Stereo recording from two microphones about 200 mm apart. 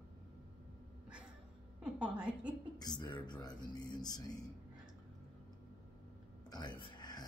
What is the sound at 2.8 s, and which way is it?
Speech, 20° left (ahead or behind).